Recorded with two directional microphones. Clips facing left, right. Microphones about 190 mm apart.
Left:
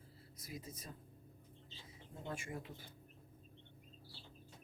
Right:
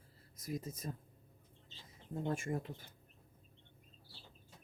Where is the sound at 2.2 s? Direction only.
45° right (ahead or behind).